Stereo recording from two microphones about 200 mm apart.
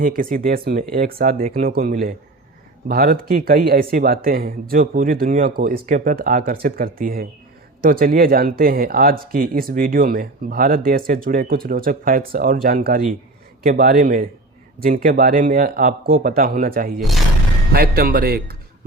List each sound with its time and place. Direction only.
0.0 s speech: 45° right (ahead or behind)